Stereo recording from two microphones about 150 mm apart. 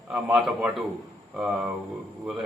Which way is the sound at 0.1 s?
5° right (ahead or behind).